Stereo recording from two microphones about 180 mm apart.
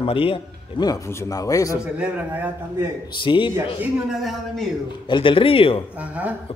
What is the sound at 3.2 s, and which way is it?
Speech, 25° left (ahead or behind).